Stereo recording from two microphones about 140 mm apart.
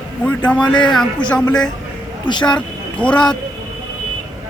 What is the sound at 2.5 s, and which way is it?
Speech, 5° left (ahead or behind).